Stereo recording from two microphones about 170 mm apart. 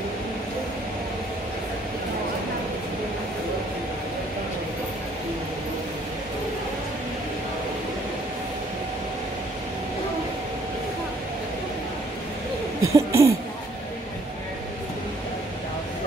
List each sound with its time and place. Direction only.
12.8 s laughter: 15° right (ahead or behind)